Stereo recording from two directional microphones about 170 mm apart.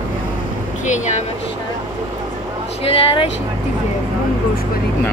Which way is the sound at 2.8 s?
35° left (ahead or behind).